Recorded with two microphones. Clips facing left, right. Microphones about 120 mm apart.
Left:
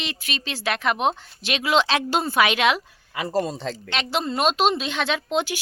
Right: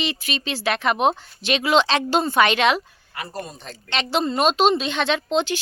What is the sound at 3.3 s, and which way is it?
Speech, 90° left.